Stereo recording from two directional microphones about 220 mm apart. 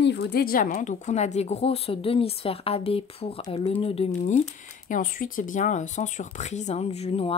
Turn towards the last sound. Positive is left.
turn(degrees=25)  # may be behind; listen again after turning